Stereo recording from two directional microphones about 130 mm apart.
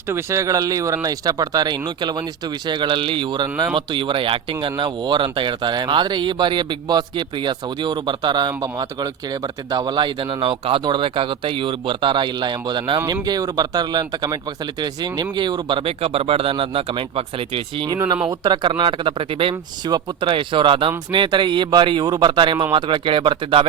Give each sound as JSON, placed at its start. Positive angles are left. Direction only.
{"t": 0.1, "sound": "speech", "side_deg": -20}